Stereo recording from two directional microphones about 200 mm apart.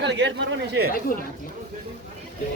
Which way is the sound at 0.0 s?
60° right (ahead or behind).